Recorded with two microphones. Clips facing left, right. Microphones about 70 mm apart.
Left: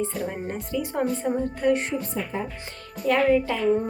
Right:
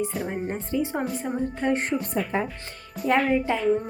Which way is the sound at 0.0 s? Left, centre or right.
Centre.